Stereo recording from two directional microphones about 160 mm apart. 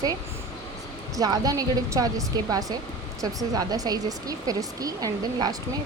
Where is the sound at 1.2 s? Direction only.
25° right (ahead or behind).